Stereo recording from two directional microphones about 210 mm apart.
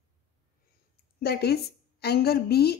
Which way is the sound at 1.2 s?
50° left (ahead or behind).